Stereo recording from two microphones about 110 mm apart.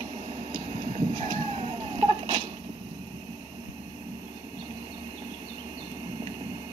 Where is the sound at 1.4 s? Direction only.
65° right (ahead or behind); by 2.4 s 50° right (ahead or behind).